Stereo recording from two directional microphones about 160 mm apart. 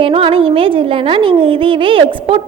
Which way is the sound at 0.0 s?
35° right (ahead or behind).